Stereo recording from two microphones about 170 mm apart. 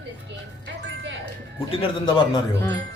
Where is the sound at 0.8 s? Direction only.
90° right.